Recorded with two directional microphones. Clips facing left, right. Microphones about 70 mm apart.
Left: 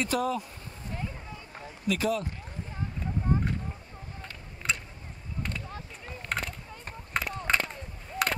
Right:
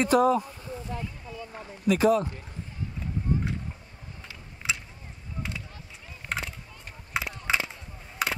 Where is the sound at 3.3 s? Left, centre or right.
Left.